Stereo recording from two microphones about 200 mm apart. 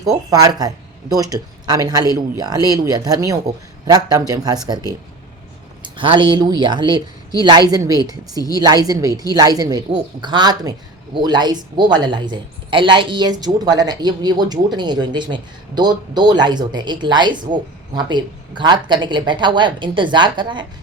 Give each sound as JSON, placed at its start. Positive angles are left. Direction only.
{"t": 0.0, "sound": "speech", "side_deg": -15}